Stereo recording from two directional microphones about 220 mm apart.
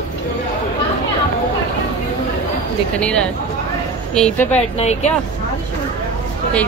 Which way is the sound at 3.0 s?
5° left (ahead or behind).